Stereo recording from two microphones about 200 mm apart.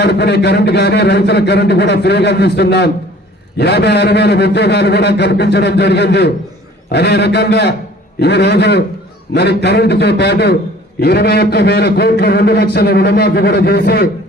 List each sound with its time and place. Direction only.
0.0 s a man's voice: 55° left (ahead or behind)